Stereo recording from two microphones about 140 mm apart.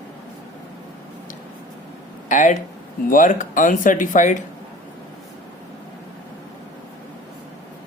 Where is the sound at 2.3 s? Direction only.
65° left (ahead or behind).